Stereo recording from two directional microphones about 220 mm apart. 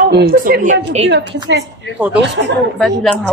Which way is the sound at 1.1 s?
50° right (ahead or behind).